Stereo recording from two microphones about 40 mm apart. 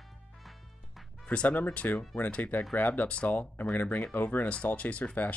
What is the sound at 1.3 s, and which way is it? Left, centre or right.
Speech, left.